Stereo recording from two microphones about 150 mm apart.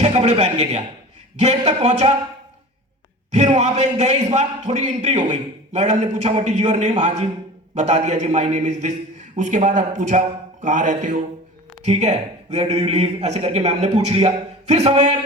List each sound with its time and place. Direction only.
0.0 s a man's voice: 45° right (ahead or behind)
3.6 s a man's voice: 50° right (ahead or behind)